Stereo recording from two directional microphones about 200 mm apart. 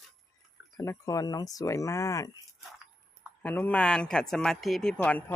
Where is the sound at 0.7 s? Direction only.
15° left (ahead or behind).